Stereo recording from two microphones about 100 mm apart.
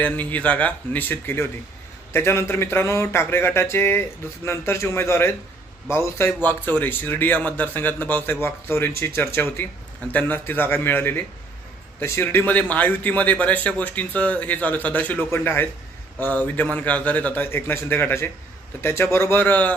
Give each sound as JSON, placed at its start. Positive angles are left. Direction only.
{"t": 0.0, "sound": "a man's voice", "side_deg": 15}